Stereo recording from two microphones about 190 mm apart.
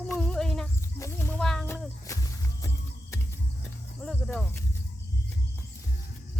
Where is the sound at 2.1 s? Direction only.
15° left (ahead or behind).